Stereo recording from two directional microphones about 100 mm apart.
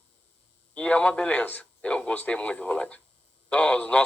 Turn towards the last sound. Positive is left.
turn(degrees=10)  # may be behind; listen again after turning